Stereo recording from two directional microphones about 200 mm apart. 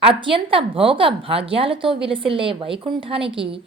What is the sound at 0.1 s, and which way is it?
A woman's voice, 25° right (ahead or behind).